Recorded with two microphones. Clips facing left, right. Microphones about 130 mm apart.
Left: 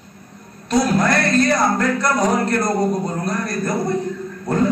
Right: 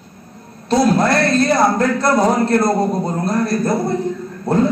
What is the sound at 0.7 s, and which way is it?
A man's voice, 30° right (ahead or behind).